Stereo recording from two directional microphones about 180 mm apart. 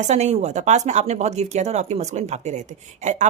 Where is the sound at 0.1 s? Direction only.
40° right (ahead or behind).